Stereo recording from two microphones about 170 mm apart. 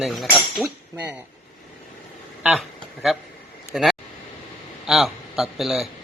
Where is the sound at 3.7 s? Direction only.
5° right (ahead or behind).